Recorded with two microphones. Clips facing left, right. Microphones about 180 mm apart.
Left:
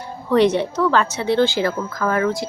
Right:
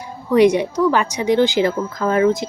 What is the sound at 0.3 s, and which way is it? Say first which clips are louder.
Speech: right 3 dB; 10° right (ahead or behind).